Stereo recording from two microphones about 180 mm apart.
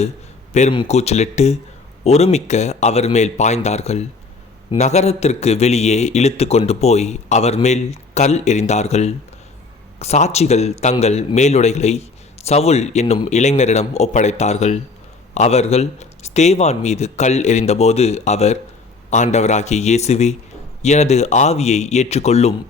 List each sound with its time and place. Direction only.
0.7 s a man's voice: 30° left (ahead or behind)